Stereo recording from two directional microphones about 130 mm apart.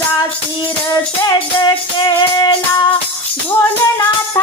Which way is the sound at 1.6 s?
30° left (ahead or behind).